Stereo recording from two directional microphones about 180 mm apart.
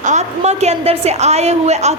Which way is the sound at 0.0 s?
40° right (ahead or behind).